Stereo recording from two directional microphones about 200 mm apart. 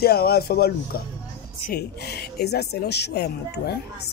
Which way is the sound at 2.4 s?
55° left (ahead or behind).